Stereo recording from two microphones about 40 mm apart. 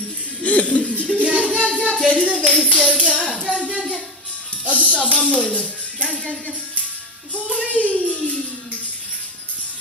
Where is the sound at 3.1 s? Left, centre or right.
Left.